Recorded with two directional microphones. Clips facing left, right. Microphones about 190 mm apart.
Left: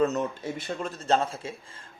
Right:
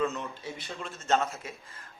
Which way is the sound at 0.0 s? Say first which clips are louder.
Left 6 dB; 40° left (ahead or behind).